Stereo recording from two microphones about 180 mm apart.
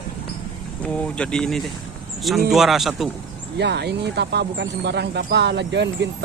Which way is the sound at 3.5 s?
70° right (ahead or behind).